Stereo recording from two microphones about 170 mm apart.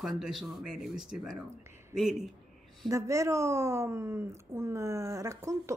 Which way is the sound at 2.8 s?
20° right (ahead or behind).